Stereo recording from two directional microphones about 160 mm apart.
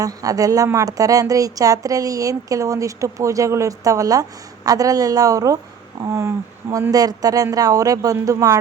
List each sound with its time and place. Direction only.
0.0 s speech: 20° right (ahead or behind)